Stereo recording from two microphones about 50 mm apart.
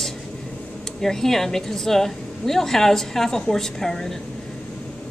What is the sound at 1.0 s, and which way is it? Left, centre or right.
Speech, centre.